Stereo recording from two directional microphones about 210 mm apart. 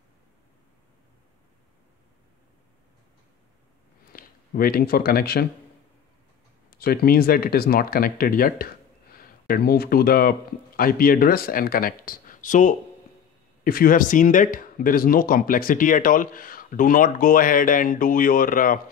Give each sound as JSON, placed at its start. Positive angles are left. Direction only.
{"t": 4.1, "sound": "speech", "side_deg": 45}
{"t": 6.7, "sound": "speech", "side_deg": 45}